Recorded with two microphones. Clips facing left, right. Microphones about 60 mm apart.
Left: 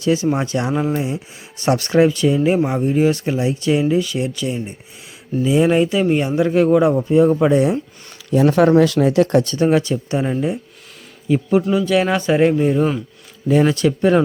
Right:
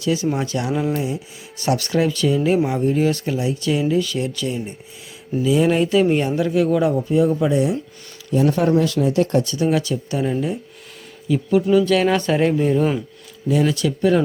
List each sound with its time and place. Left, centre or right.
0.0 s speech: left; by 6.3 s centre
6.7 s speech: left
7.3 s speech: left
8.3 s speech: left
9.5 s speech: left
11.7 s speech: centre
13.5 s speech: left